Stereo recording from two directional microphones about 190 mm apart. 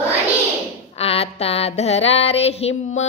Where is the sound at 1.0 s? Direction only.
30° left (ahead or behind).